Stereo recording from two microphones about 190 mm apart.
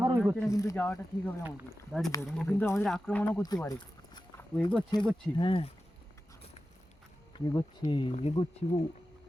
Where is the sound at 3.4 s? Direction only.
20° left (ahead or behind).